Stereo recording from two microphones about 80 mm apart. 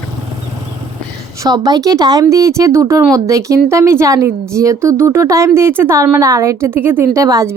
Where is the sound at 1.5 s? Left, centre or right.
Right.